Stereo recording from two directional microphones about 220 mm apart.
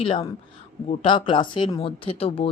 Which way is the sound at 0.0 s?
25° left (ahead or behind).